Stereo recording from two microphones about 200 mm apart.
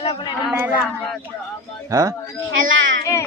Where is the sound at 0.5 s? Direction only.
5° right (ahead or behind).